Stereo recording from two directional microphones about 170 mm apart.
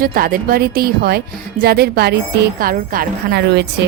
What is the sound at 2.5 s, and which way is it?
Speech, 60° right (ahead or behind).